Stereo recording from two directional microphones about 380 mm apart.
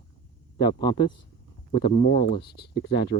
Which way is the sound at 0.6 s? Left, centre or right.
Centre.